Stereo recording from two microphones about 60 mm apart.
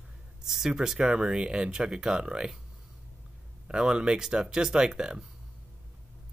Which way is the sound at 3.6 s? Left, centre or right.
Centre.